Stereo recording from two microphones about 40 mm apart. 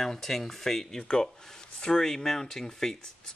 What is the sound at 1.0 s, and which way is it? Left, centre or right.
Speech, left.